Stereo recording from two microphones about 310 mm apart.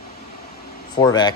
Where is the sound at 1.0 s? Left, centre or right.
Centre.